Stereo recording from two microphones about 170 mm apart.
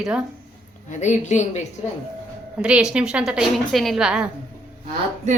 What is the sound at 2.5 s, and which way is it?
A woman's voice, 5° right (ahead or behind).